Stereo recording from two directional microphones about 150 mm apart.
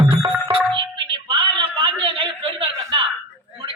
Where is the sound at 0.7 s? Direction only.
35° right (ahead or behind).